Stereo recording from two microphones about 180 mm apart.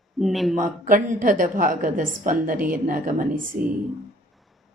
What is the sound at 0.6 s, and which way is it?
A woman's voice, 50° right (ahead or behind).